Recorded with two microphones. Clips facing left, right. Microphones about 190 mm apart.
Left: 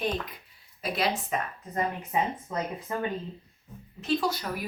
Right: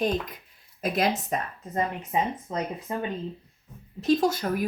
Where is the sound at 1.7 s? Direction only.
20° right (ahead or behind).